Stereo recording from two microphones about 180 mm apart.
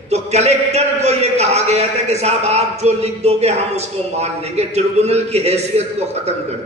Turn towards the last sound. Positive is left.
turn(degrees=-35)  # may be behind; listen again after turning